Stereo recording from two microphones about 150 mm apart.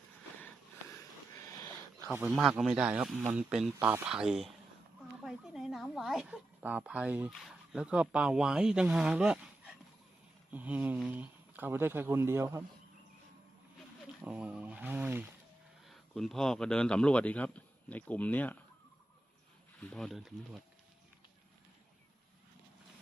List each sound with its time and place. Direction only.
1.4 s sniff: 20° left (ahead or behind)
2.1 s a woman's voice: 5° right (ahead or behind)
14.2 s speech: 10° right (ahead or behind)
15.9 s a man's voice: centre (ahead or behind)
19.9 s speech: centre (ahead or behind)